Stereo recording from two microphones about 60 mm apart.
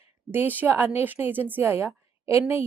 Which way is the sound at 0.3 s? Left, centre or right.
Right.